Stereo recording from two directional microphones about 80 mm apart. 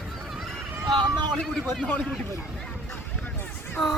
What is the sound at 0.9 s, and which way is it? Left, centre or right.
Speech, right.